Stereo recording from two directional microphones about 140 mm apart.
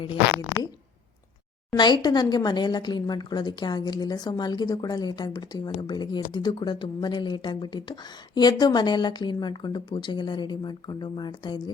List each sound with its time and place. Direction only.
1.7 s speech: 30° left (ahead or behind)